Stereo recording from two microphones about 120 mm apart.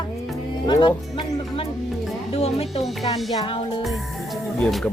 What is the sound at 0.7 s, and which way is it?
Speech, 40° left (ahead or behind).